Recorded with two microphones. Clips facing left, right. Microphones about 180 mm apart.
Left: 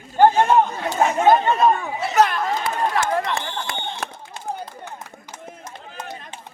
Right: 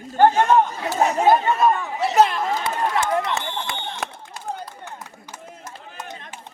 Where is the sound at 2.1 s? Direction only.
25° right (ahead or behind).